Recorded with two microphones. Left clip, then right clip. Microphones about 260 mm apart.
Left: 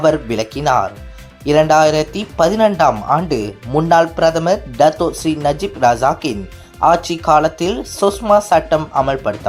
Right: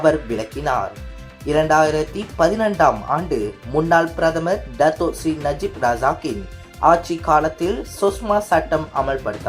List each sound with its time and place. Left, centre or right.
0.0 s speech: left